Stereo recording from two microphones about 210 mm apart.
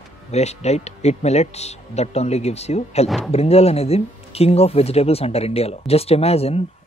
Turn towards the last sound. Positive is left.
turn(degrees=30)  # may be behind; listen again after turning